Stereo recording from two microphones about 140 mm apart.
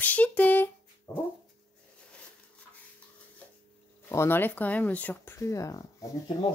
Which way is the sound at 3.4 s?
10° left (ahead or behind).